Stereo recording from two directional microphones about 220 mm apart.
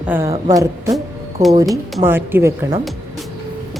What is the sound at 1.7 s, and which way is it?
A woman's voice, 5° right (ahead or behind).